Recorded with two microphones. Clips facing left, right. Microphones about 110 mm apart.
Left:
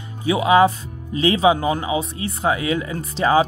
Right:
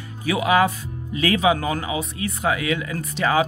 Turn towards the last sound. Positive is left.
turn(degrees=30)  # may be behind; listen again after turning